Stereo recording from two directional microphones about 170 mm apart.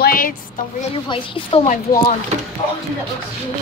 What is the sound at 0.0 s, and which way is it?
Speech, 55° left (ahead or behind).